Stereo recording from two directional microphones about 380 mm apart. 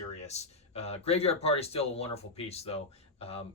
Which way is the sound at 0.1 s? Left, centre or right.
Centre.